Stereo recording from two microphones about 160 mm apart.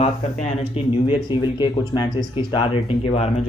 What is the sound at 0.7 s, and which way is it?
Speech, 30° left (ahead or behind).